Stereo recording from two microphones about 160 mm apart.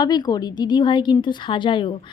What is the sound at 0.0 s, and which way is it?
Speech, 25° left (ahead or behind).